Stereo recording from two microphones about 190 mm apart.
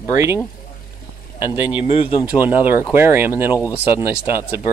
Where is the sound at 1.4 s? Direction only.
25° left (ahead or behind).